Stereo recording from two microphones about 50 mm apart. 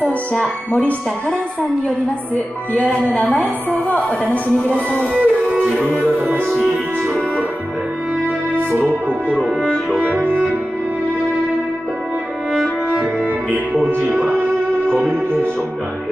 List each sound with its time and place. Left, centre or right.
2.3 s a woman's voice: left
5.1 s music: right
9.9 s music: right
12.9 s music: right